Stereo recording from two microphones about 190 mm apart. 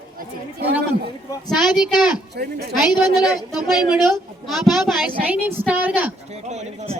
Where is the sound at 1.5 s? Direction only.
5° right (ahead or behind).